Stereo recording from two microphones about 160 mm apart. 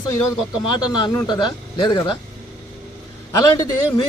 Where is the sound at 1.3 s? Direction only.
30° left (ahead or behind).